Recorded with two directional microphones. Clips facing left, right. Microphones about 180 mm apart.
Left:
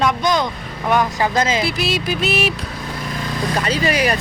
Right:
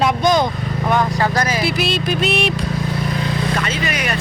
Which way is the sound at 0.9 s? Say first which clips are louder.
Left 1 dB; 15° left (ahead or behind).